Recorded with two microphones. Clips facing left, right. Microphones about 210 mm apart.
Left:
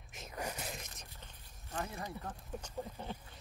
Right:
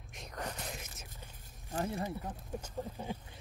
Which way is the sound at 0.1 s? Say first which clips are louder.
Even; 5° left (ahead or behind).